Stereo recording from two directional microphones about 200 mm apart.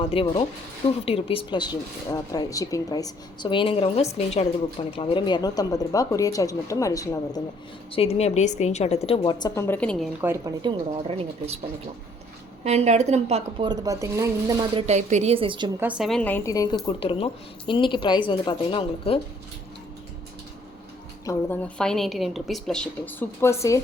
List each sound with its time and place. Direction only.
0.0 s a woman's voice: 25° left (ahead or behind)
7.9 s speech: 30° left (ahead or behind); by 10.1 s 5° left (ahead or behind)
10.2 s a woman's voice: 15° right (ahead or behind); by 11.6 s 30° right (ahead or behind)
12.6 s a woman's voice: 35° right (ahead or behind); by 14.8 s 20° right (ahead or behind)
14.8 s a woman's voice: 35° right (ahead or behind)
15.8 s speech: 5° right (ahead or behind); by 19.2 s 25° left (ahead or behind)
21.2 s a woman's voice: 10° left (ahead or behind)